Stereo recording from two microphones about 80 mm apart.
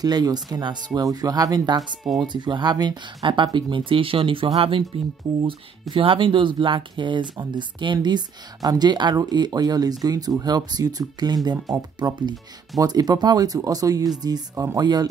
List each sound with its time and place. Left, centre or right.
0.0 s speech: right
1.1 s speech: right
2.2 s speech: right
3.7 s speech: right
8.6 s speech: right
14.5 s speech: right
14.8 s speech: right